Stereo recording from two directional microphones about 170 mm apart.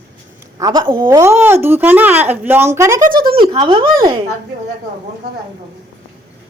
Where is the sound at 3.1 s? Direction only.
60° right (ahead or behind).